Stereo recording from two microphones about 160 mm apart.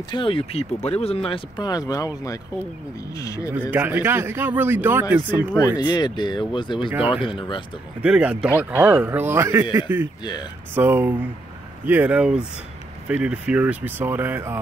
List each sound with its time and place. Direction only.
0.1 s speech: 35° left (ahead or behind)
3.2 s speech: 20° left (ahead or behind)
3.4 s speech: 10° right (ahead or behind)
5.8 s speech: 25° left (ahead or behind)
8.0 s speech: 10° right (ahead or behind)